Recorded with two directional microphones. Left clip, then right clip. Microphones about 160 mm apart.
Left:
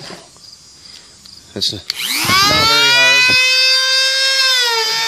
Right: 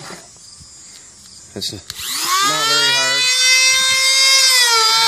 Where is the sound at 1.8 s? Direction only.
40° left (ahead or behind).